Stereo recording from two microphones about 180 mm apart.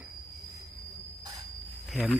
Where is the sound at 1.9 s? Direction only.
Centre (ahead or behind).